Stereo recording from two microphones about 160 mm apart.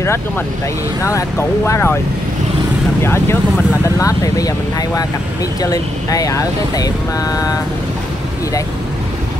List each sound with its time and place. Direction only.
1.0 s speech: 20° left (ahead or behind)
3.0 s speech: 15° left (ahead or behind)